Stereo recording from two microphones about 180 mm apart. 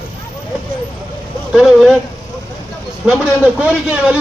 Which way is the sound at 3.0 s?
5° right (ahead or behind).